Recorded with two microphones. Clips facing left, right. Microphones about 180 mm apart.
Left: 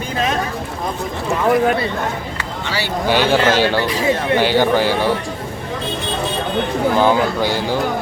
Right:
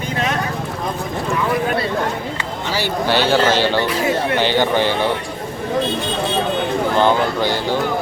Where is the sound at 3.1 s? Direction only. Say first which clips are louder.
Left 1 dB; 10° left (ahead or behind).